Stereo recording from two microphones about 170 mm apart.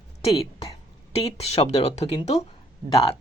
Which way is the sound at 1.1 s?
35° left (ahead or behind).